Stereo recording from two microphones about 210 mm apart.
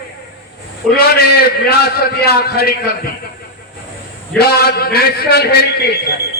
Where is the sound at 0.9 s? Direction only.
45° left (ahead or behind).